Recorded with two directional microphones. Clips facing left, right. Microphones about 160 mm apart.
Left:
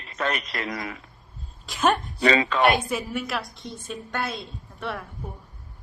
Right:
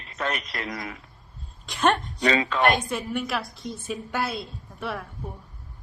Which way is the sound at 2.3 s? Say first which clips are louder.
Left 2 dB; 90° left.